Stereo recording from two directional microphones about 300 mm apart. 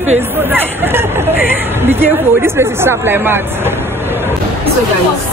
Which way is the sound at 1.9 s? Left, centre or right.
Centre.